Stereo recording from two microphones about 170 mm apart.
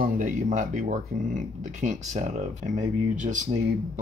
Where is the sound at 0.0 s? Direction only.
50° right (ahead or behind).